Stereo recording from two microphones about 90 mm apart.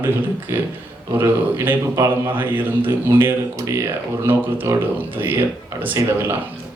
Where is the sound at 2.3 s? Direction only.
20° right (ahead or behind).